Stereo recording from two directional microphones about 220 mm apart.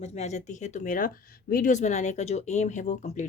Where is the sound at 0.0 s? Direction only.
30° left (ahead or behind).